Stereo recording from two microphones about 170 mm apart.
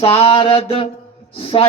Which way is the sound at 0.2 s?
35° left (ahead or behind).